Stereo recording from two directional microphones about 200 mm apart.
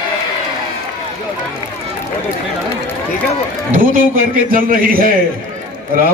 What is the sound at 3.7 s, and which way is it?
A man's voice, 45° right (ahead or behind).